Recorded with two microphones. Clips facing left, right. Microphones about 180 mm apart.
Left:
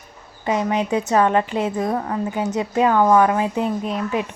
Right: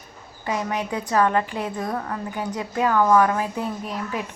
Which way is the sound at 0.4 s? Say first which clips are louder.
Left 5 dB; 20° left (ahead or behind).